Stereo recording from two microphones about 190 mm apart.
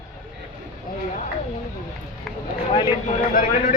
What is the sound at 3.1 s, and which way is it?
Speech, 45° left (ahead or behind).